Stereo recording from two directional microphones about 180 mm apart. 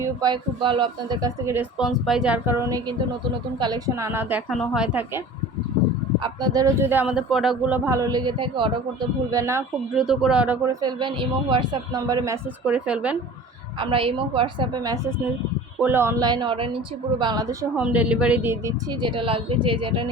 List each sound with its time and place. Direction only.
0.0 s a man's voice: 20° right (ahead or behind)
1.8 s speech: centre (ahead or behind)
6.1 s speech: 25° right (ahead or behind); by 7.8 s centre (ahead or behind)
7.9 s a man's voice: 20° right (ahead or behind)
9.9 s speech: centre (ahead or behind)
10.8 s a man's voice: 25° right (ahead or behind); by 13.1 s 5° right (ahead or behind)
13.7 s a man's voice: 30° right (ahead or behind)
15.8 s a man's voice: 10° right (ahead or behind)
17.7 s speech: 10° right (ahead or behind)
18.9 s a man's voice: 25° right (ahead or behind)